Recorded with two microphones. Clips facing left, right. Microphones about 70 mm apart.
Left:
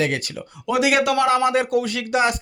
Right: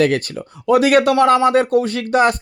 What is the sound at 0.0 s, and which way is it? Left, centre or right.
A man's voice, right.